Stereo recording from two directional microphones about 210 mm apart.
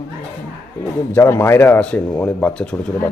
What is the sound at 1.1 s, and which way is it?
Speech, 10° left (ahead or behind).